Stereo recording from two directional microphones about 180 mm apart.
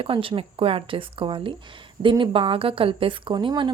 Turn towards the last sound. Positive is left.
turn(degrees=-25)  # may be behind; listen again after turning